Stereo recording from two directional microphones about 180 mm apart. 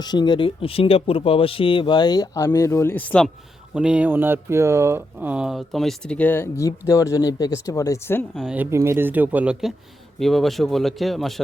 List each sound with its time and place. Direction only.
0.0 s speech: 25° left (ahead or behind)
3.8 s speech: 5° right (ahead or behind); by 8.2 s 15° left (ahead or behind)
8.4 s speech: 5° right (ahead or behind)